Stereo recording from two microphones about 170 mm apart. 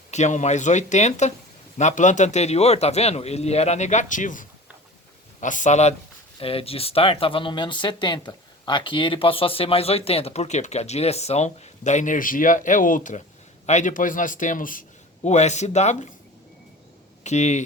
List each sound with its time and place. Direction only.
0.1 s a man's voice: 45° left (ahead or behind)
17.2 s speech: 40° left (ahead or behind)